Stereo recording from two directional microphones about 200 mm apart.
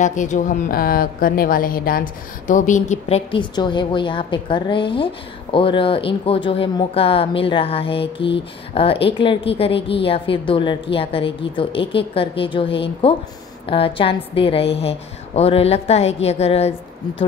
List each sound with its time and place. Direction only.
0.0 s a woman's voice: 40° left (ahead or behind)